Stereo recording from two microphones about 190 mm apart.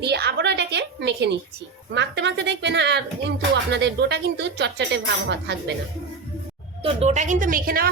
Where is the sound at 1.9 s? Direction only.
65° right (ahead or behind).